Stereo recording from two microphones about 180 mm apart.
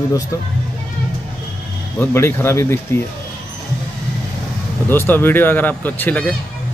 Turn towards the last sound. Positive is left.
turn(degrees=10)  # may be behind; listen again after turning